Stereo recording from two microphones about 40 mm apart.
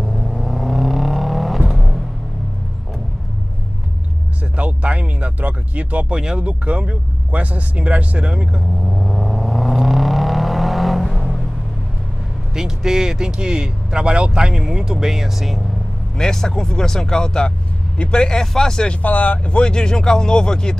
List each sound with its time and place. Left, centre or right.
0.0 s vehicle: centre
1.7 s music: centre
4.6 s a sound: right
6.1 s speech: right
8.8 s vehicle: centre
12.5 s speech: centre
16.2 s speech: centre
19.0 s speech: left; by 20.7 s centre